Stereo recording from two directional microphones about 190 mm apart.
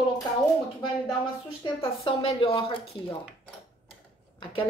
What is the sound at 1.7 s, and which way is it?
A woman's voice, 30° left (ahead or behind).